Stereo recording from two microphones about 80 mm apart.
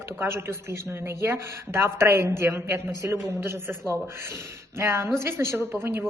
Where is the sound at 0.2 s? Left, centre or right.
Right.